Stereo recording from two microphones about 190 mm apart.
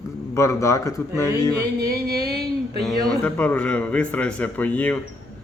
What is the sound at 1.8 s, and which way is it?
Music, 15° right (ahead or behind).